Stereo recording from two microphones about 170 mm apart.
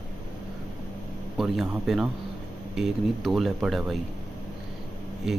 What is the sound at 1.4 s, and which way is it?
Speech, centre (ahead or behind).